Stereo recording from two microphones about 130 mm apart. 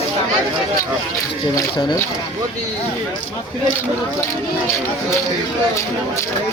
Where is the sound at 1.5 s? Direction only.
25° left (ahead or behind).